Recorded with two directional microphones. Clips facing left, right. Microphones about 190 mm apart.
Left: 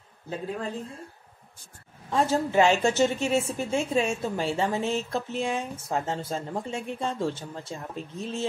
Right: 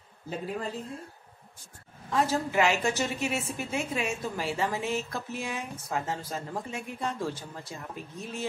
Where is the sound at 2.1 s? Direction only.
30° left (ahead or behind).